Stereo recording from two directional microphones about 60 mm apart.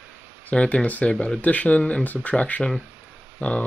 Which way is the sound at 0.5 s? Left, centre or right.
Centre.